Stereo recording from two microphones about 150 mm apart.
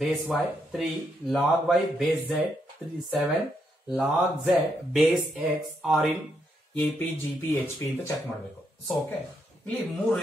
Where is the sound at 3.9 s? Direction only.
Centre (ahead or behind).